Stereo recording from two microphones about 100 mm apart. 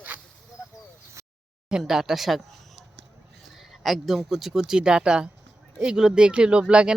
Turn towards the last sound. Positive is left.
turn(degrees=-10)  # may be behind; listen again after turning